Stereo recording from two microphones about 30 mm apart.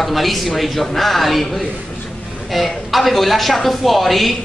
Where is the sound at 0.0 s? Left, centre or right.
Centre.